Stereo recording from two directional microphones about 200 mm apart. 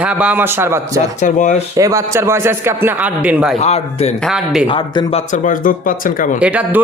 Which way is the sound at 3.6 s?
30° left (ahead or behind).